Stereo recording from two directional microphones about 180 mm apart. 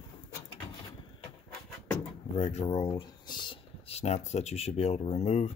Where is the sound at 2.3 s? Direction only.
35° left (ahead or behind).